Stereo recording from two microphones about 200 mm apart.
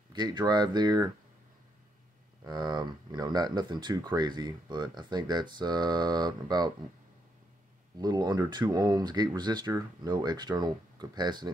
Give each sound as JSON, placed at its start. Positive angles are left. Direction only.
{"t": 0.1, "sound": "speech", "side_deg": -20}
{"t": 2.4, "sound": "speech", "side_deg": -20}
{"t": 8.0, "sound": "speech", "side_deg": -20}